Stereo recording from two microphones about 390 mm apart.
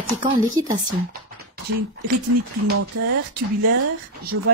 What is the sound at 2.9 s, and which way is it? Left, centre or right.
Speech, right.